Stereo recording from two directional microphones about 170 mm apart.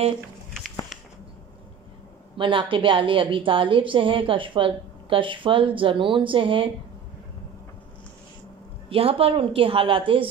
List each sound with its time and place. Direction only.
2.3 s a woman's voice: 30° right (ahead or behind)
8.8 s a woman's voice: 35° right (ahead or behind)